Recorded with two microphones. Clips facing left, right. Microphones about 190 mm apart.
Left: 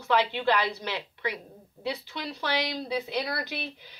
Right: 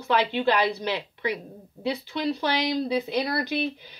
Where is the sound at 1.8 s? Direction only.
20° right (ahead or behind).